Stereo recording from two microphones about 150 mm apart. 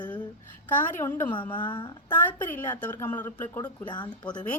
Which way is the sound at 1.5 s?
30° left (ahead or behind).